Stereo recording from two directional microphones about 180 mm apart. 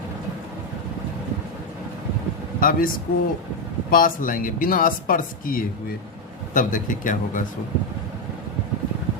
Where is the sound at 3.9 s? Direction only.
50° left (ahead or behind).